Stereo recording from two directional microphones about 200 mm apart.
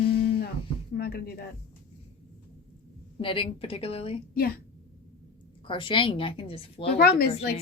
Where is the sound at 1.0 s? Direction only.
50° left (ahead or behind).